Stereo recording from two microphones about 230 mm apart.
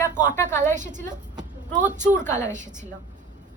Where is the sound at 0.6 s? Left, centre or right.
Right.